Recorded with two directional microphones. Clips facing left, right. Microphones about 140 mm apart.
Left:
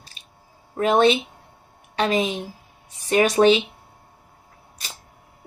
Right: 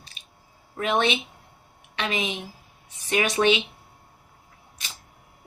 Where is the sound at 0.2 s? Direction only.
40° left (ahead or behind).